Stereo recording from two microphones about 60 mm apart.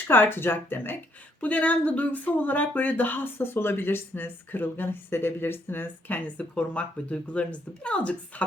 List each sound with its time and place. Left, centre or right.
0.1 s speech: left
1.4 s speech: left